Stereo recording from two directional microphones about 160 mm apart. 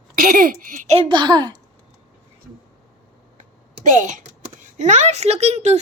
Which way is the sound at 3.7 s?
50° right (ahead or behind).